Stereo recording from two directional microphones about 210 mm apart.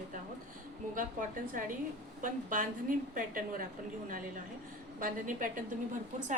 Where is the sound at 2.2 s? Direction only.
40° right (ahead or behind).